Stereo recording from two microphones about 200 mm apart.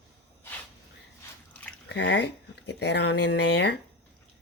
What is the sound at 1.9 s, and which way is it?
Speech, 60° left (ahead or behind).